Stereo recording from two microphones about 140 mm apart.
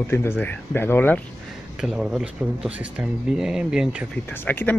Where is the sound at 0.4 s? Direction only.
15° left (ahead or behind).